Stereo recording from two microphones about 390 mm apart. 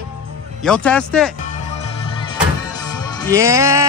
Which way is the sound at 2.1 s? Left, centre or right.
Centre.